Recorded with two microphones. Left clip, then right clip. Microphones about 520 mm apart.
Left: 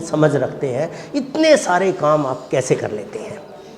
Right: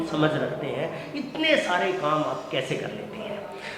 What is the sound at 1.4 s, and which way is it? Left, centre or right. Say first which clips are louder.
Speech: left 9 dB; left.